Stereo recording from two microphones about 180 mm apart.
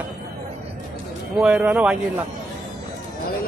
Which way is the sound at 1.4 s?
5° right (ahead or behind).